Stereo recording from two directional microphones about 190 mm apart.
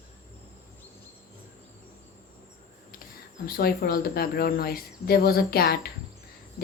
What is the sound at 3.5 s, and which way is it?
A woman's voice, 50° left (ahead or behind).